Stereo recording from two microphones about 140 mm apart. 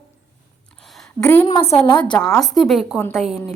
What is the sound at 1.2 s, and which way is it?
A woman's voice, 15° left (ahead or behind).